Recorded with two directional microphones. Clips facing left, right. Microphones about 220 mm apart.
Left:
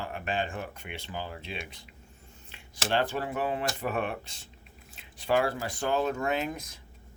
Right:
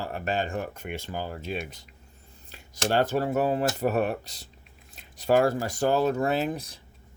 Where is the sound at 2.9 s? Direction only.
40° right (ahead or behind).